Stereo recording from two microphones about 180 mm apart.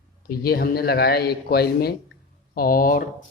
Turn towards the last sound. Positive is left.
turn(degrees=50)  # may be behind; listen again after turning